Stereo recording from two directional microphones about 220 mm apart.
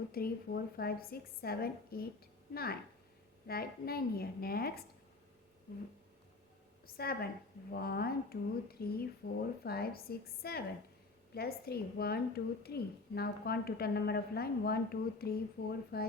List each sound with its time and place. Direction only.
0.1 s a woman's voice: 45° left (ahead or behind)
6.9 s a woman's voice: 45° left (ahead or behind)